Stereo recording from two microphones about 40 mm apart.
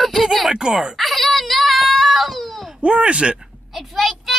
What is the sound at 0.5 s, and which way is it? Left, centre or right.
Speech, centre.